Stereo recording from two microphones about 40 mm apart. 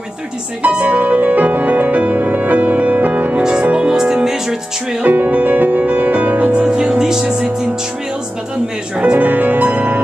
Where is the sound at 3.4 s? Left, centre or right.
Right.